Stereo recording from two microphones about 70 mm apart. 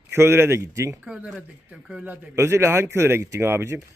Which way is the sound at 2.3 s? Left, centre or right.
Right.